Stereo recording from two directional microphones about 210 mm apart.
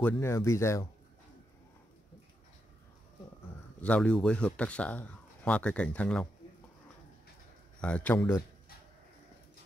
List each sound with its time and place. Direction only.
0.0 s speech: 10° left (ahead or behind)
3.8 s speech: 5° left (ahead or behind)
7.8 s speech: 5° left (ahead or behind)